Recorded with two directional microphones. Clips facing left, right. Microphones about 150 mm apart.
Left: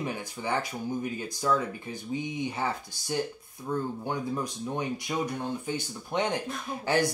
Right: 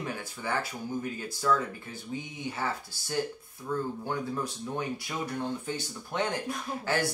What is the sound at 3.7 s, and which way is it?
Speech, 20° left (ahead or behind).